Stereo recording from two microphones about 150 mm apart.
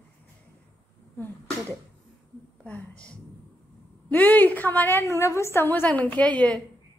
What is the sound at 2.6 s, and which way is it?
A woman's voice, 5° left (ahead or behind).